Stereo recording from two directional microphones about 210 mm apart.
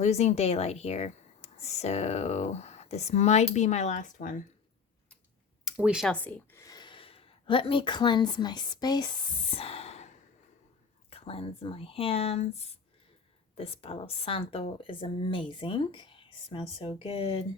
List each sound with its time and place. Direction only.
0.0 s speech: 30° left (ahead or behind)
5.6 s speech: 5° right (ahead or behind); by 17.4 s 25° left (ahead or behind)